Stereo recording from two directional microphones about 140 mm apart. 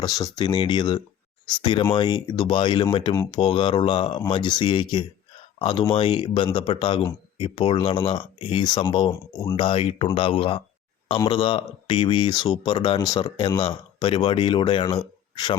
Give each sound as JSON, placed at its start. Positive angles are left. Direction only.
{"t": 0.0, "sound": "speech", "side_deg": 30}
{"t": 14.0, "sound": "speech", "side_deg": 45}